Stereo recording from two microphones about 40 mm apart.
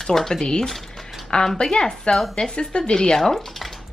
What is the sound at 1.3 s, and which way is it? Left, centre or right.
Speech, left.